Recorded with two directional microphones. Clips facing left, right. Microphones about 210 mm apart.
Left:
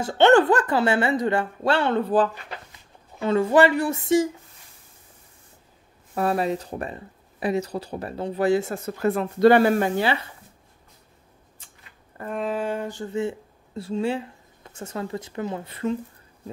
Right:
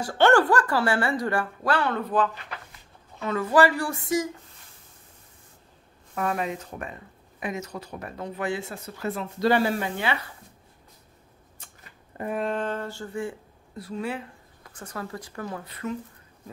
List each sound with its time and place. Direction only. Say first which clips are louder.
0.0 s speech: left 3 dB; 20° left (ahead or behind)
6.1 s speech: left 5 dB; 35° left (ahead or behind)
12.3 s speech: left 1 dB; centre (ahead or behind); by 16.0 s 25° left (ahead or behind)